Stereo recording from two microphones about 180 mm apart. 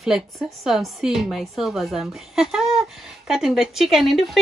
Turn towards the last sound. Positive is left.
turn(degrees=0)  # may be behind; listen again after turning